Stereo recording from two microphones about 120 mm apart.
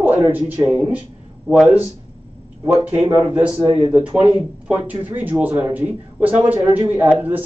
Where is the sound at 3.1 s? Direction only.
10° right (ahead or behind).